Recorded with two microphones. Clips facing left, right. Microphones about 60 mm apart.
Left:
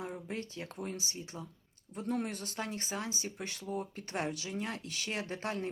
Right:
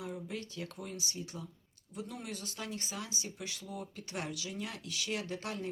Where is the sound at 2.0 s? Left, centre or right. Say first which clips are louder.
Left 6 dB; left.